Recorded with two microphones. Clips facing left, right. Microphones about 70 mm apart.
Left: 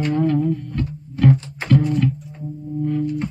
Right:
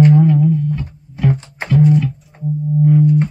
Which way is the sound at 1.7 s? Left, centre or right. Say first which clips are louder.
Right 4 dB; centre.